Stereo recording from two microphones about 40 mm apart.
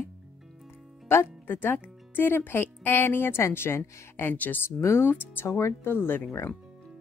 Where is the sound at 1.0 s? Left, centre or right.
Left.